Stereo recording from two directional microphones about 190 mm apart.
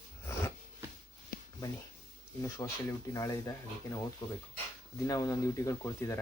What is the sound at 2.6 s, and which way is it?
Speech, 20° left (ahead or behind).